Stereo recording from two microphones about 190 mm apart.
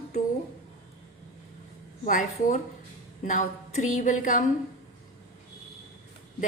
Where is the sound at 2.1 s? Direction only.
45° left (ahead or behind).